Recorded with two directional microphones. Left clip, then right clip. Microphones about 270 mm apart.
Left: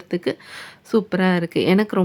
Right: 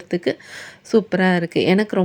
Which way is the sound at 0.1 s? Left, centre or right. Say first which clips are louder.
Right 2 dB; centre.